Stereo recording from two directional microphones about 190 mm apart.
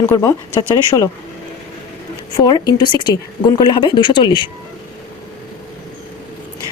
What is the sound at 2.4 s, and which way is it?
Speech, 20° left (ahead or behind).